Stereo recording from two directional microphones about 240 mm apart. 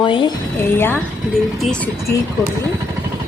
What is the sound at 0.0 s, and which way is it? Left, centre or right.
Speech, centre.